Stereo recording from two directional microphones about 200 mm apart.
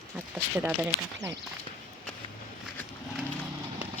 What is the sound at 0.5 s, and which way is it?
Speech, 10° right (ahead or behind).